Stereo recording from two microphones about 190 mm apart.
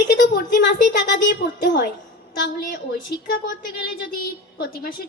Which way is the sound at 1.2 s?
65° left (ahead or behind).